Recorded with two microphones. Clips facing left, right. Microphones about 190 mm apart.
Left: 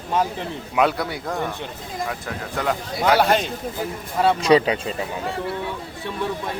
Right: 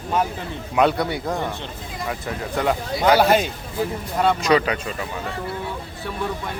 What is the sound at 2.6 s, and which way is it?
Speech, centre (ahead or behind).